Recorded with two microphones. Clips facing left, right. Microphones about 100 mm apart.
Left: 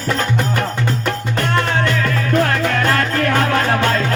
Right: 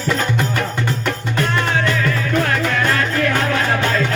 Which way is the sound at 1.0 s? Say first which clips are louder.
Even; 50° left (ahead or behind).